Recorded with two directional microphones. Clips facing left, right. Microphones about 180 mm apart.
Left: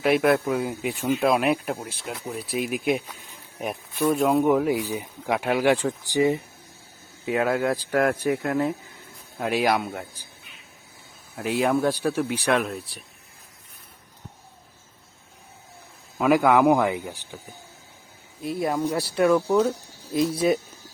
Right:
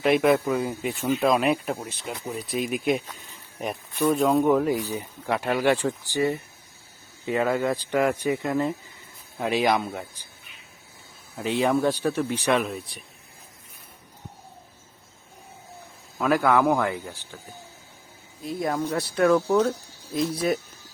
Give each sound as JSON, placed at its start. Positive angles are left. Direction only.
{"t": 0.0, "sound": "speech", "side_deg": 5}
{"t": 7.3, "sound": "speech", "side_deg": 5}
{"t": 11.3, "sound": "speech", "side_deg": 5}
{"t": 16.1, "sound": "speech", "side_deg": 15}
{"t": 18.4, "sound": "speech", "side_deg": 10}